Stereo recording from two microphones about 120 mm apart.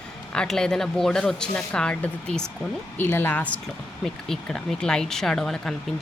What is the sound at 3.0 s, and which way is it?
Speech, 20° left (ahead or behind).